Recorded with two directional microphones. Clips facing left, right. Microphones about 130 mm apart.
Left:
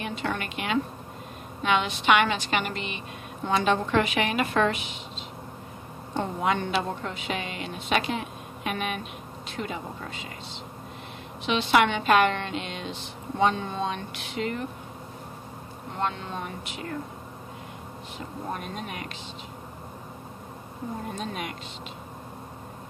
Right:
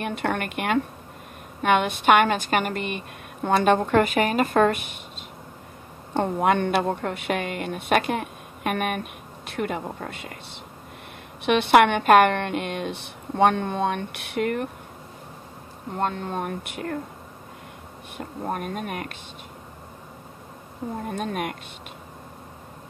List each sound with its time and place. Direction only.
0.0 s a woman's voice: 55° right (ahead or behind)
6.1 s a woman's voice: 55° right (ahead or behind)
11.4 s a woman's voice: 60° right (ahead or behind)
16.0 s a woman's voice: 45° right (ahead or behind)
18.1 s a woman's voice: 50° right (ahead or behind)
21.1 s a woman's voice: 55° right (ahead or behind)